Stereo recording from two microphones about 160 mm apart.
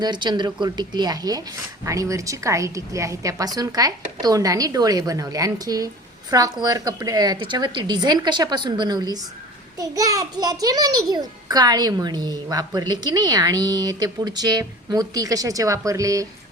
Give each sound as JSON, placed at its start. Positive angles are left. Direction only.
{"t": 0.0, "sound": "a child's voice", "side_deg": -25}